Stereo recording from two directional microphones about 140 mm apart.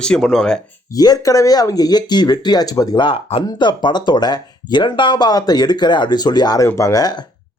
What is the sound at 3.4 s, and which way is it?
Speech, 30° left (ahead or behind).